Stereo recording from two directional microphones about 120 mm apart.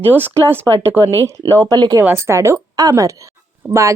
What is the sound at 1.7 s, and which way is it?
Speech, 35° right (ahead or behind).